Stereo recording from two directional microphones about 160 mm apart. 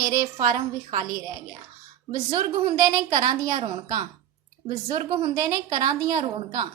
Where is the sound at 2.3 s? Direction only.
25° right (ahead or behind).